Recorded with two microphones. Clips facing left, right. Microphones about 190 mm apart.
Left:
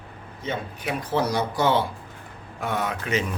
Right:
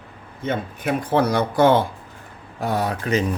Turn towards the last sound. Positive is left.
turn(degrees=-35)  # may be behind; listen again after turning